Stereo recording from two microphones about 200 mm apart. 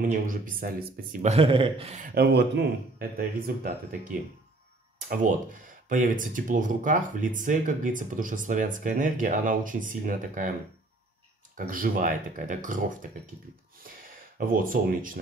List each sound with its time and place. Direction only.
0.0 s speech: 40° right (ahead or behind)
1.3 s speech: 25° right (ahead or behind)
2.1 s speech: 55° right (ahead or behind)
11.5 s speech: 45° right (ahead or behind)
14.4 s speech: 45° right (ahead or behind)